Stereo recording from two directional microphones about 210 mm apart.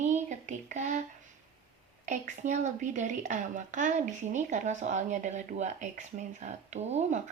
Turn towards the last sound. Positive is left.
turn(degrees=-30)  # may be behind; listen again after turning